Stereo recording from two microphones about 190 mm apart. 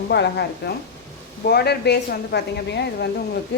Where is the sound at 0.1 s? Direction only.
60° left (ahead or behind).